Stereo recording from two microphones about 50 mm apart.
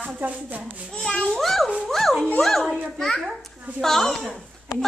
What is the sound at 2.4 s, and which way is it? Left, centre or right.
Children playing, centre.